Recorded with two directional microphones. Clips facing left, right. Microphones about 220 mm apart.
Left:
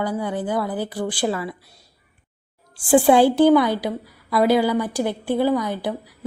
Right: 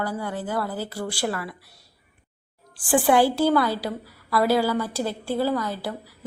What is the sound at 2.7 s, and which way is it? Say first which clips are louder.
A woman's voice: left 5 dB; 25° left (ahead or behind).